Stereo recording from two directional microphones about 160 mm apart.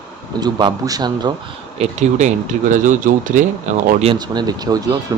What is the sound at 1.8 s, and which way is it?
Speech, 45° right (ahead or behind).